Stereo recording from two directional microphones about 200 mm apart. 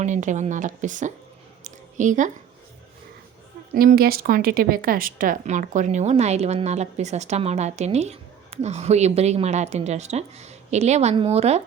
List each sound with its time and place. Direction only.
0.0 s speech: 40° right (ahead or behind)
1.6 s a sound: 40° right (ahead or behind)
3.8 s speech: 50° right (ahead or behind); by 11.6 s 30° right (ahead or behind)